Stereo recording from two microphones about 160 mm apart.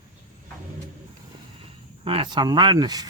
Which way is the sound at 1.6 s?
35° right (ahead or behind).